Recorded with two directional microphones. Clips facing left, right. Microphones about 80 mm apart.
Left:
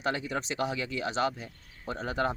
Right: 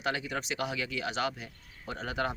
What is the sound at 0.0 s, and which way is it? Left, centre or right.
Speech, left.